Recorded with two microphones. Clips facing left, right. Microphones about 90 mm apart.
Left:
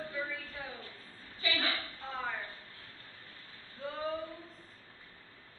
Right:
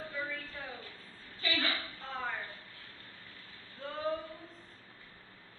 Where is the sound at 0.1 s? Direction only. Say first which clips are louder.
Even; centre (ahead or behind).